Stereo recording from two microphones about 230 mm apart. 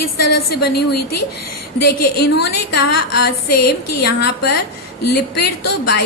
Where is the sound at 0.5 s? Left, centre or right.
Left.